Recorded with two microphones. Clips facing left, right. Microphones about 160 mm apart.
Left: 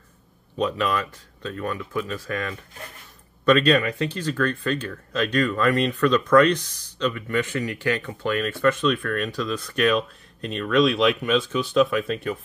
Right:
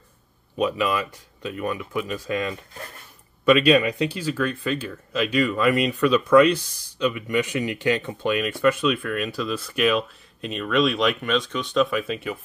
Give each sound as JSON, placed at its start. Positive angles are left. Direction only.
{"t": 0.6, "sound": "speech", "side_deg": -10}